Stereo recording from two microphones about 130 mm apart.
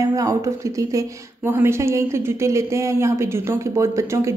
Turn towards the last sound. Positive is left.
turn(degrees=-20)  # may be behind; listen again after turning